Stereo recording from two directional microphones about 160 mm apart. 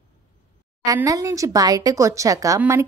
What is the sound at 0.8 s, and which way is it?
A woman's voice, 20° right (ahead or behind).